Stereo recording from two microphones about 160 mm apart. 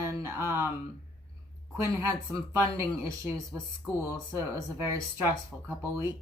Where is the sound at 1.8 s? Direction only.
15° right (ahead or behind).